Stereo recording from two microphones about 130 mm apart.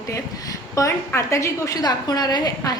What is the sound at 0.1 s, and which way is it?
A woman's voice, 25° left (ahead or behind).